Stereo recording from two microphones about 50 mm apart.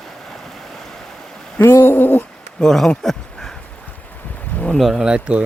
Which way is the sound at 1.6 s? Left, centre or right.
Left.